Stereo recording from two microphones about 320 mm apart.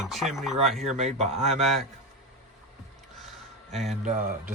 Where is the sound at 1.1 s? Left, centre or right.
Right.